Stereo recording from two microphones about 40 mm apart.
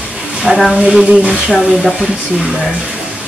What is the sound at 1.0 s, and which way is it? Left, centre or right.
Speech, right.